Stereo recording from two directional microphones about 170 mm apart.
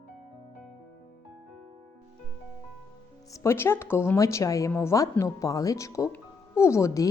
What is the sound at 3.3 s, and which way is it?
Speech, 15° left (ahead or behind).